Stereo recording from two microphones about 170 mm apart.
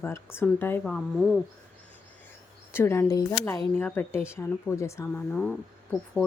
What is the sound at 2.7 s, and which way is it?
Speech, 15° left (ahead or behind).